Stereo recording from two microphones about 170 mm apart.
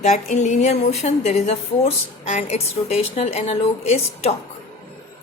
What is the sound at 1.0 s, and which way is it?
A woman's voice, 40° left (ahead or behind).